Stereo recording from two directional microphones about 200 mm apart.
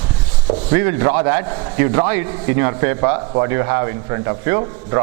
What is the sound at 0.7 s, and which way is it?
A man's voice, 10° right (ahead or behind).